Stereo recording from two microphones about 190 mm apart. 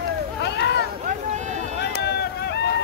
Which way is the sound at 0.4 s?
65° left (ahead or behind).